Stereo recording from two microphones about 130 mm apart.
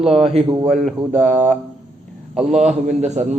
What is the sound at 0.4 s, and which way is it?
Speech, 35° right (ahead or behind).